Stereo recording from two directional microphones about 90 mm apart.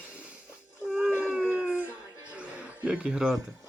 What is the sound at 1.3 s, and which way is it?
Dog, 15° right (ahead or behind).